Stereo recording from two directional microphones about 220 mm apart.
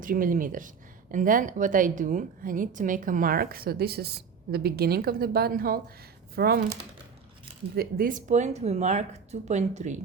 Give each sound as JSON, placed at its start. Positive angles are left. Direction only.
{"t": 0.0, "sound": "a woman's voice", "side_deg": -40}
{"t": 7.8, "sound": "a woman's voice", "side_deg": -40}